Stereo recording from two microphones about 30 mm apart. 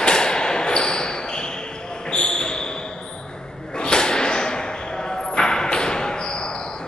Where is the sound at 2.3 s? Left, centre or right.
Left.